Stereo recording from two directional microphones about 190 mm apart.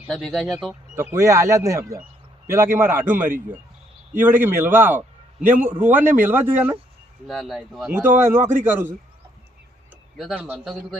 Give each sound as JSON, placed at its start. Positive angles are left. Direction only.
{"t": 0.0, "sound": "speech", "side_deg": 0}
{"t": 0.9, "sound": "a man's voice", "side_deg": -15}
{"t": 7.3, "sound": "a man's voice", "side_deg": 0}